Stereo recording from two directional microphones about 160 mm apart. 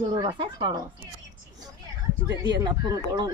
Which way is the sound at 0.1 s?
30° right (ahead or behind).